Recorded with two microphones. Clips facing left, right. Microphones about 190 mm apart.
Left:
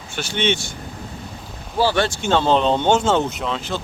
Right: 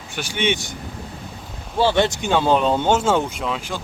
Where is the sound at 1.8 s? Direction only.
20° right (ahead or behind).